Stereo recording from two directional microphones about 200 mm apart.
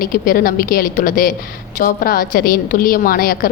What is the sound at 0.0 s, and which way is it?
A woman's voice, 45° left (ahead or behind).